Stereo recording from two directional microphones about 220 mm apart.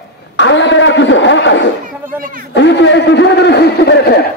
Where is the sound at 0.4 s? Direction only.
55° left (ahead or behind).